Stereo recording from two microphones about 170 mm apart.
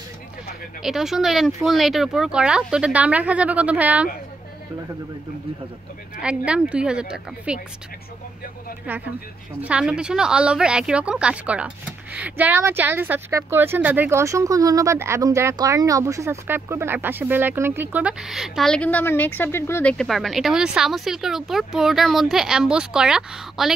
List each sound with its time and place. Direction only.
0.8 s speech: centre (ahead or behind)
6.2 s speech: 5° right (ahead or behind)
9.6 s a woman's voice: 5° right (ahead or behind)